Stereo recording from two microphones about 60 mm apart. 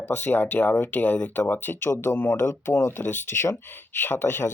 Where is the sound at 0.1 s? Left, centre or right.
Left.